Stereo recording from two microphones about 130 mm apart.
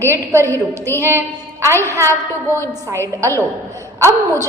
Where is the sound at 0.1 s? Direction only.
20° right (ahead or behind).